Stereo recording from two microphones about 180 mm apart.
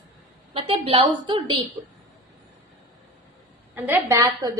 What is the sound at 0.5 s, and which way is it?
A woman's voice, 30° right (ahead or behind).